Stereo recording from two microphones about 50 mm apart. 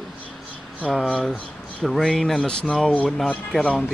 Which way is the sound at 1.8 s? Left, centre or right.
Centre.